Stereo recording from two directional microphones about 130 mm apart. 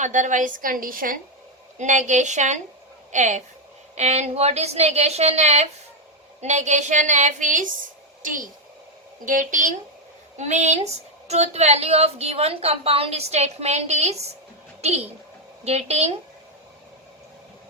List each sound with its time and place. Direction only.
0.0 s a woman's voice: 70° right (ahead or behind); by 1.2 s 90° right
1.8 s a woman's voice: 65° right (ahead or behind)
8.2 s a woman's voice: 90° right
10.3 s a woman's voice: 65° right (ahead or behind)